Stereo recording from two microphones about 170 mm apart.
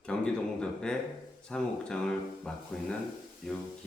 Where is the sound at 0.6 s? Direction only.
5° left (ahead or behind).